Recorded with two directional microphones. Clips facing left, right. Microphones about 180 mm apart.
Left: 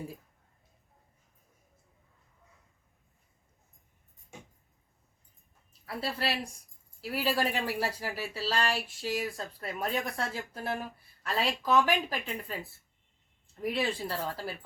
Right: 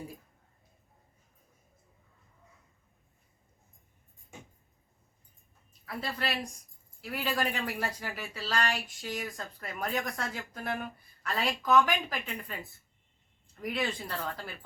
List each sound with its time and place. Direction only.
5.8 s speech: 30° left (ahead or behind)
13.6 s speech: 30° left (ahead or behind)